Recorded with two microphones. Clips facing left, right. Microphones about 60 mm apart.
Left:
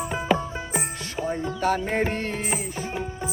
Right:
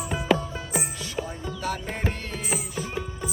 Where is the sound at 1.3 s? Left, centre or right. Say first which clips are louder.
Left 7 dB; left.